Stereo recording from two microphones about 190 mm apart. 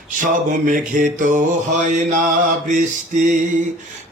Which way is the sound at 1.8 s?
40° right (ahead or behind).